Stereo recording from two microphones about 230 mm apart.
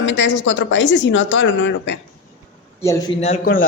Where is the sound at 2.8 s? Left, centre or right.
Centre.